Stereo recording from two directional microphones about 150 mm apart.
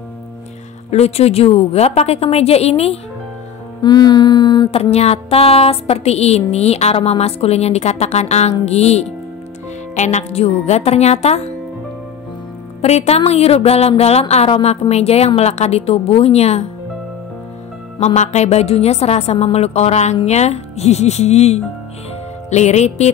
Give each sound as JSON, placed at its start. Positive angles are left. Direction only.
{"t": 0.8, "sound": "a woman's voice", "side_deg": 45}
{"t": 3.8, "sound": "mantra", "side_deg": 25}
{"t": 4.9, "sound": "a woman's voice", "side_deg": 45}
{"t": 12.8, "sound": "a woman's voice", "side_deg": 45}
{"t": 17.9, "sound": "a woman's voice", "side_deg": 45}